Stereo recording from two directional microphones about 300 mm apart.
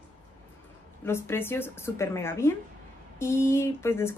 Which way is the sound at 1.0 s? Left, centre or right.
Centre.